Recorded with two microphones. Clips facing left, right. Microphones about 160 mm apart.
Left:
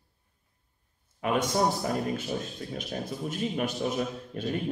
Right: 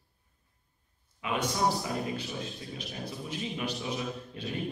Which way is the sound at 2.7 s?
50° left (ahead or behind).